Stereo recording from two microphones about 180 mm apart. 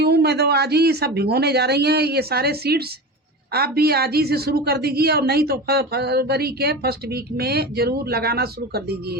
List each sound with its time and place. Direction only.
0.0 s a woman's voice: 65° right (ahead or behind)